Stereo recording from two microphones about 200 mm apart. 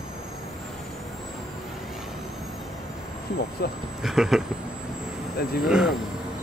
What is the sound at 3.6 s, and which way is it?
Speech, 50° left (ahead or behind).